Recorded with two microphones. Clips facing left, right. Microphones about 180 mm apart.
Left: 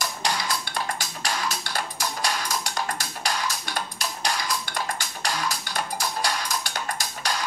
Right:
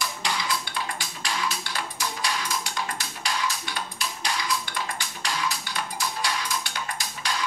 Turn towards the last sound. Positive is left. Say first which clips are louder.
# left 3 dB
turn(degrees=40)  # may be behind; listen again after turning